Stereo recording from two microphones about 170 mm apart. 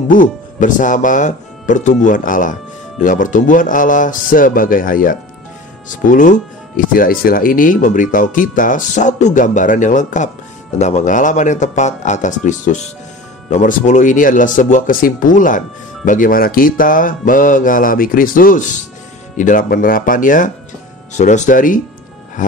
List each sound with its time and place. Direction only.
0.1 s speech: 50° left (ahead or behind)